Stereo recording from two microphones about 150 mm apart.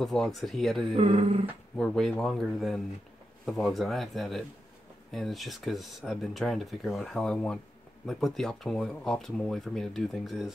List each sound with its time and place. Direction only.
0.0 s speech: 5° left (ahead or behind)
0.9 s speech: 40° right (ahead or behind)
1.8 s speech: 5° left (ahead or behind)